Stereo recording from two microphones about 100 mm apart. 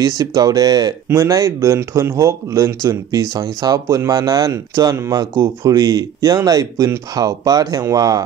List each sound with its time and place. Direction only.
0.0 s speech: 40° right (ahead or behind)
1.0 s speech: 30° right (ahead or behind)